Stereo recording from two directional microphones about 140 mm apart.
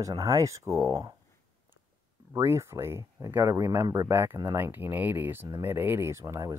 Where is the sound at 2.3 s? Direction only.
20° right (ahead or behind).